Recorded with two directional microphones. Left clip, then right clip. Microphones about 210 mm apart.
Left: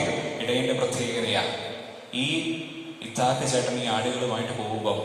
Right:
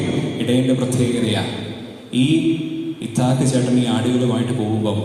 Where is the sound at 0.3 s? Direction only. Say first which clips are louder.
Right 7 dB; 50° right (ahead or behind).